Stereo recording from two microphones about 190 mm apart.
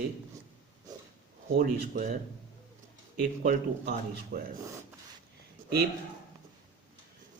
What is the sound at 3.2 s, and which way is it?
Speech, 45° right (ahead or behind).